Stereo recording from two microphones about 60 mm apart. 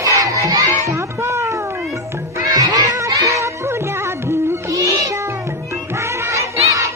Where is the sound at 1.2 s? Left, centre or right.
Right.